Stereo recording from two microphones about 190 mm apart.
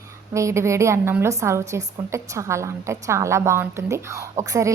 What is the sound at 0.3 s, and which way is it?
A woman's voice, 15° right (ahead or behind).